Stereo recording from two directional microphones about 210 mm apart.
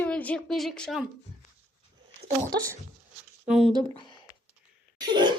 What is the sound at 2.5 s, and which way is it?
Speech, 50° right (ahead or behind).